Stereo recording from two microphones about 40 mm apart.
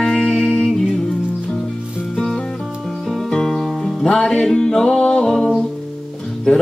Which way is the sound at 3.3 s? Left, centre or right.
Centre.